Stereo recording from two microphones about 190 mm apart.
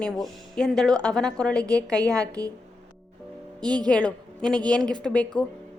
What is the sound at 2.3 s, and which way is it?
Speech, 20° right (ahead or behind).